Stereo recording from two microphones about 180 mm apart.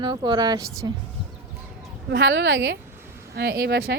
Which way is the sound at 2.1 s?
70° right (ahead or behind).